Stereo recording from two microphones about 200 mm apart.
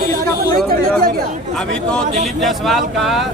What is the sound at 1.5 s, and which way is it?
Speech, 5° left (ahead or behind).